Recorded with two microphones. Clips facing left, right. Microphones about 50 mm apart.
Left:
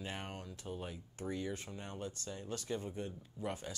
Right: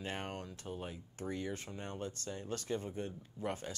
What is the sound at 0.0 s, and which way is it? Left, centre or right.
Speech, right.